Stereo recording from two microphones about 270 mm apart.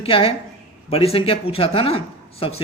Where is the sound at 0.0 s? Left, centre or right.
Left.